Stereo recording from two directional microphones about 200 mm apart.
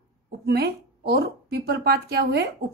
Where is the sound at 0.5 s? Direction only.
55° right (ahead or behind).